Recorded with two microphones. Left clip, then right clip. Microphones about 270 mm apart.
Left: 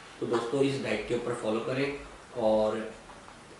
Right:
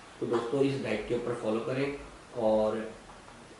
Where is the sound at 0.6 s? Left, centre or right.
Centre.